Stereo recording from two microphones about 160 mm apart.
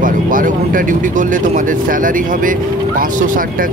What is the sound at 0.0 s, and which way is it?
Speech, 55° right (ahead or behind).